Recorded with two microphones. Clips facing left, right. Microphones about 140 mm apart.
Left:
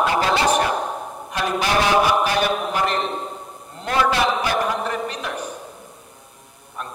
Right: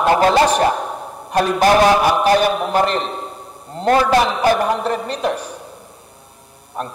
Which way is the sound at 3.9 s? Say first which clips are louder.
Right 5 dB; 45° right (ahead or behind).